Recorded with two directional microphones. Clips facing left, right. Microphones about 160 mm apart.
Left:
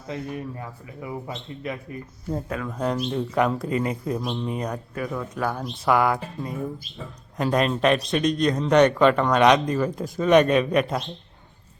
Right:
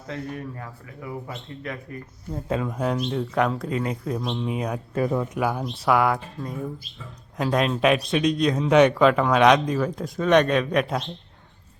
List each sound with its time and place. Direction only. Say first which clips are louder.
0.1 s speech: left 1 dB; 15° left (ahead or behind)
2.5 s speech: right 4 dB; 25° right (ahead or behind)
2.7 s a man's voice: even; centre (ahead or behind)
4.9 s speech: right 8 dB; 30° right (ahead or behind)
5.3 s a man's voice: right 2 dB; 10° right (ahead or behind)